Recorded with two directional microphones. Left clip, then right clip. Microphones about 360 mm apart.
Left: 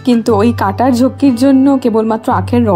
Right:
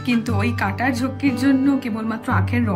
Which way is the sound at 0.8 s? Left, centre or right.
Left.